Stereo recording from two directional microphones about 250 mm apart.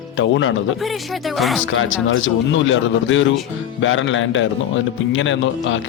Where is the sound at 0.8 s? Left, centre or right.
Centre.